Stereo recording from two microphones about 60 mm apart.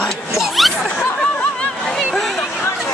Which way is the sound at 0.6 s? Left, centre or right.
Centre.